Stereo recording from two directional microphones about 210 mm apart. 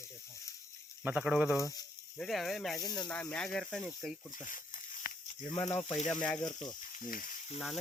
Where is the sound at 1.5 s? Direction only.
15° left (ahead or behind).